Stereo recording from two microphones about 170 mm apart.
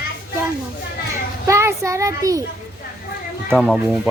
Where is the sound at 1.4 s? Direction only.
15° right (ahead or behind).